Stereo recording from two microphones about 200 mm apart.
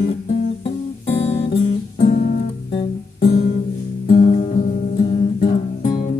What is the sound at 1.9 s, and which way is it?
Guitar, 40° left (ahead or behind).